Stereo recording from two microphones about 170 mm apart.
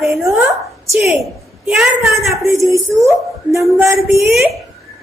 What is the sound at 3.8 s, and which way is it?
Speech, centre (ahead or behind).